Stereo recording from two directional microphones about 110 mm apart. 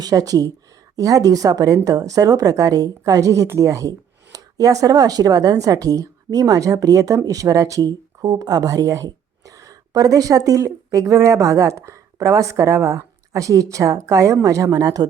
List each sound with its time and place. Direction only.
0.0 s speech: 35° right (ahead or behind)